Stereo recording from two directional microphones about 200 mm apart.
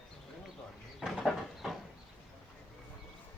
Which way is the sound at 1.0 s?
Centre (ahead or behind).